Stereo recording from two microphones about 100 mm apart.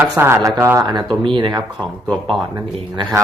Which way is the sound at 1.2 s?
55° right (ahead or behind).